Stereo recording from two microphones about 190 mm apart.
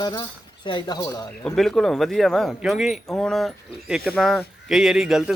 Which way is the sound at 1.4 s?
5° left (ahead or behind).